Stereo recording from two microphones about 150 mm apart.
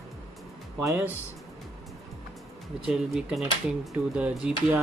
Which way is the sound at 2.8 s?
Centre (ahead or behind).